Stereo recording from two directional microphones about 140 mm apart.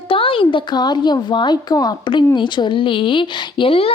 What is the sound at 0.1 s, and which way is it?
A woman's voice, 40° left (ahead or behind).